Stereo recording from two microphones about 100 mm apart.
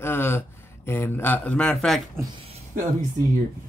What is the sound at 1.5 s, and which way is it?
Speech, 5° left (ahead or behind).